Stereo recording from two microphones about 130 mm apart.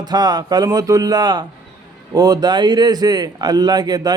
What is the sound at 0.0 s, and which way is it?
A man's voice, 30° right (ahead or behind).